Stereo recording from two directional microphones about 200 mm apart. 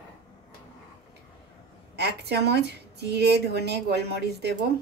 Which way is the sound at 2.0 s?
55° right (ahead or behind).